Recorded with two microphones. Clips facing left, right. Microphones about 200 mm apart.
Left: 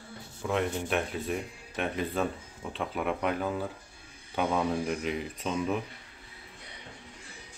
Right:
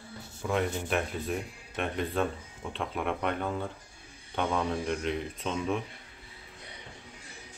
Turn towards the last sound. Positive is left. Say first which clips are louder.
# left 1 dB
turn(degrees=5)  # may be behind; listen again after turning